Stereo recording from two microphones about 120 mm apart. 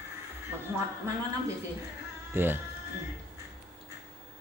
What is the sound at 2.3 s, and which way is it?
Speech, 20° right (ahead or behind).